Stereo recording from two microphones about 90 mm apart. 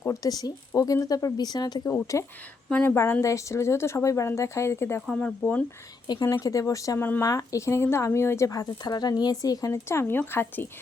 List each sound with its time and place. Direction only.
0.0 s speech: 40° left (ahead or behind)
2.1 s speech: 35° left (ahead or behind)
5.0 s speech: 15° left (ahead or behind)
6.1 s speech: 50° left (ahead or behind); by 10.7 s 25° left (ahead or behind)